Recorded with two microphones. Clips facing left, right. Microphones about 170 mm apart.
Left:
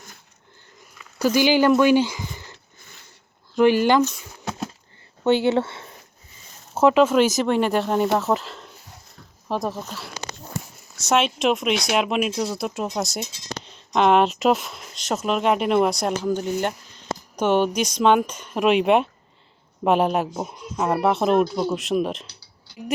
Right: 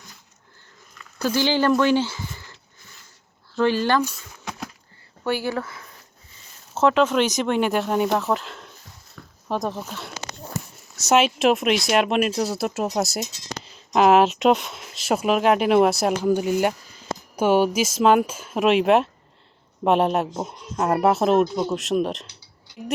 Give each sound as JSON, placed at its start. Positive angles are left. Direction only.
{"t": 1.2, "sound": "speech", "side_deg": 15}
{"t": 4.4, "sound": "a sound", "side_deg": 25}
{"t": 5.2, "sound": "speech", "side_deg": 20}
{"t": 6.7, "sound": "speech", "side_deg": 5}
{"t": 11.1, "sound": "speech", "side_deg": -5}